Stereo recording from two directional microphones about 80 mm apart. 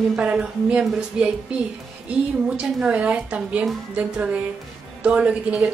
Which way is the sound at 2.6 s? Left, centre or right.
Centre.